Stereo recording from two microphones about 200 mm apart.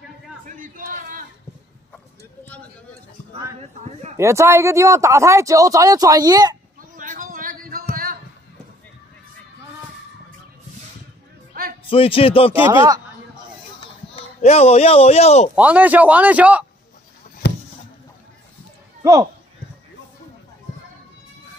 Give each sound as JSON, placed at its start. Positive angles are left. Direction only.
{"t": 0.5, "sound": "a sound", "side_deg": -45}
{"t": 4.2, "sound": "speech", "side_deg": -15}
{"t": 6.8, "sound": "a sound", "side_deg": -40}
{"t": 11.9, "sound": "a man's voice", "side_deg": 25}
{"t": 12.5, "sound": "speech", "side_deg": -15}
{"t": 14.1, "sound": "speech", "side_deg": 30}
{"t": 15.5, "sound": "speech", "side_deg": -5}